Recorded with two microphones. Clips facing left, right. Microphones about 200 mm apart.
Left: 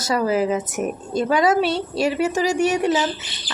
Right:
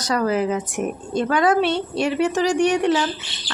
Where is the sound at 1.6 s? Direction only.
40° left (ahead or behind).